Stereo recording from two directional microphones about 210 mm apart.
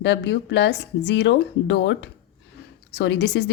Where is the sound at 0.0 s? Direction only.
55° left (ahead or behind).